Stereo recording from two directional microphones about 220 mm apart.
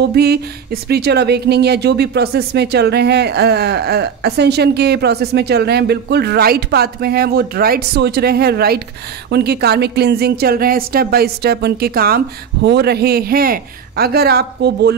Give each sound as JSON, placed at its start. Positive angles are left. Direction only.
{"t": 0.0, "sound": "speech", "side_deg": -45}